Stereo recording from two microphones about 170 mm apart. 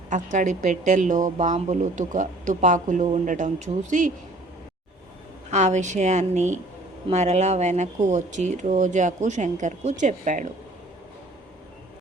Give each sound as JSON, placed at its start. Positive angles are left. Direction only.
{"t": 0.1, "sound": "a woman's voice", "side_deg": -45}
{"t": 5.5, "sound": "a woman's voice", "side_deg": -45}